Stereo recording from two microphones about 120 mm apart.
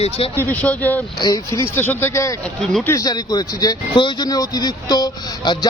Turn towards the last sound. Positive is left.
turn(degrees=35)  # may be behind; listen again after turning